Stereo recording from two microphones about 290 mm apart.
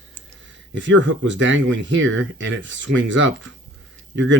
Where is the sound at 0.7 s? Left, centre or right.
Right.